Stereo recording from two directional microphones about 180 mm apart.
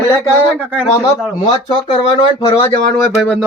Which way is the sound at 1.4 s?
25° left (ahead or behind).